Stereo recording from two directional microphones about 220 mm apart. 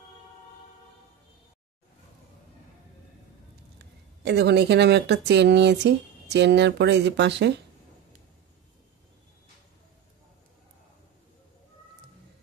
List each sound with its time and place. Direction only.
3.7 s a woman's voice: 50° right (ahead or behind)